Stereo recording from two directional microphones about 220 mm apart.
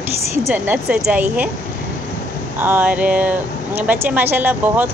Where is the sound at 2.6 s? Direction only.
10° right (ahead or behind).